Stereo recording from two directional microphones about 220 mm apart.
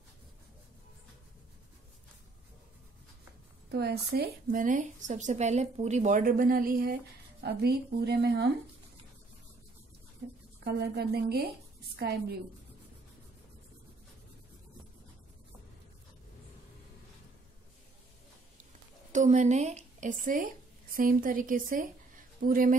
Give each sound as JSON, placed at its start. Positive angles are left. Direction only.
{"t": 3.7, "sound": "speech", "side_deg": -45}
{"t": 10.2, "sound": "a sound", "side_deg": -45}
{"t": 10.6, "sound": "speech", "side_deg": -45}
{"t": 19.1, "sound": "a woman's voice", "side_deg": -35}